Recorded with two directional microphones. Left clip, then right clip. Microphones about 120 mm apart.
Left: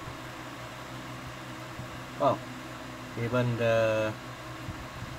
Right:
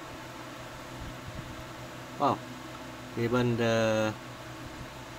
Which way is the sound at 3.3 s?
50° right (ahead or behind).